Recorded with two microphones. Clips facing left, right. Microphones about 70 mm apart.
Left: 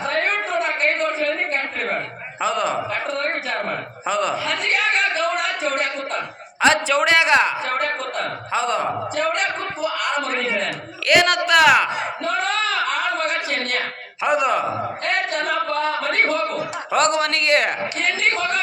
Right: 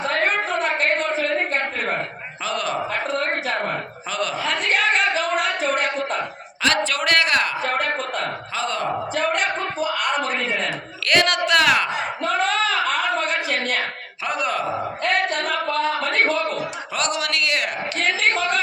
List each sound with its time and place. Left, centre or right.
2.4 s a sound: left
4.1 s speech: left
6.6 s a man's voice: centre
8.5 s speech: centre
11.0 s a man's voice: centre
14.3 s a man's voice: centre
16.9 s a man's voice: left